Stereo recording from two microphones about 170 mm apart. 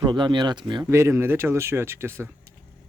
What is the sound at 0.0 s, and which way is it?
Speech, 25° right (ahead or behind).